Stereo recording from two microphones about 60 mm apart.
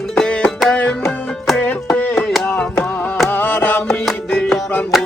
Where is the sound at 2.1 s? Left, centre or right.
Centre.